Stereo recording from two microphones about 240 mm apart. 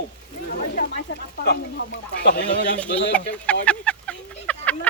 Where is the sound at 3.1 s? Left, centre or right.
Centre.